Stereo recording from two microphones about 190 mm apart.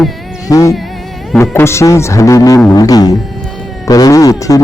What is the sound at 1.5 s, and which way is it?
Speech, 15° left (ahead or behind).